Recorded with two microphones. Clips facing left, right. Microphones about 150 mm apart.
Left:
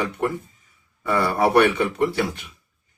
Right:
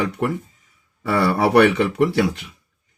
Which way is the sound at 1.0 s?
80° right.